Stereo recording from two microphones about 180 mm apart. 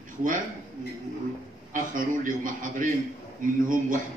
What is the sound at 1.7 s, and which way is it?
A man's voice, 50° right (ahead or behind).